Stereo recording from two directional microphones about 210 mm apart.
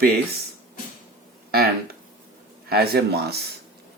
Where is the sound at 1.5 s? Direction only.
50° right (ahead or behind).